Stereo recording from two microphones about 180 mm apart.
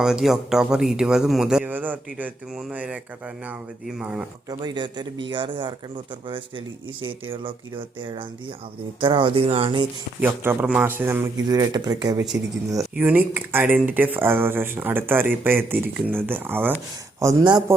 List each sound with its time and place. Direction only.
0.0 s speech: 5° right (ahead or behind)
4.4 s speech: 25° right (ahead or behind)
7.3 s speech: 30° right (ahead or behind)
10.2 s speech: 10° right (ahead or behind)
12.7 s speech: 10° right (ahead or behind)